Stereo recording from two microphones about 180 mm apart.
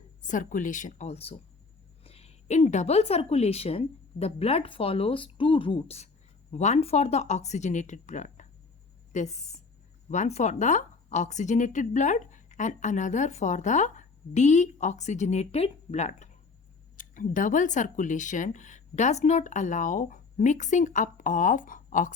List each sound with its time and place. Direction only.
0.2 s speech: 45° left (ahead or behind)